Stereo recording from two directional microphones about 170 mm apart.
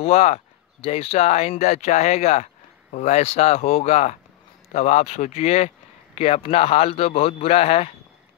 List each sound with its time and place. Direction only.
0.0 s speech: 40° left (ahead or behind)